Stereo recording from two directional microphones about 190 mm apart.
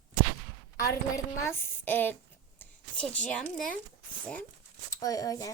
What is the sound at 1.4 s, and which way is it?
Speech, 10° left (ahead or behind).